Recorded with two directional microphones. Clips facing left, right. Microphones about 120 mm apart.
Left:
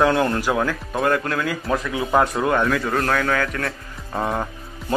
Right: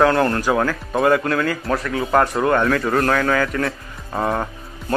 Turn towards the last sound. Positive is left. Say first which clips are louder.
# right 1 dB
turn(degrees=0)  # may be behind; listen again after turning